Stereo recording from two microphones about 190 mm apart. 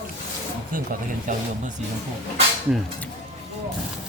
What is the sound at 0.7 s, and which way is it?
Speech, 50° right (ahead or behind).